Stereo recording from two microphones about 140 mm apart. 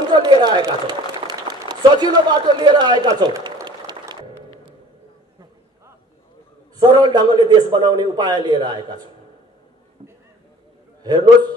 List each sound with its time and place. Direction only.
0.1 s a sound: 30° right (ahead or behind)
6.8 s a man's voice: 30° right (ahead or behind)
11.0 s a man's voice: 30° right (ahead or behind)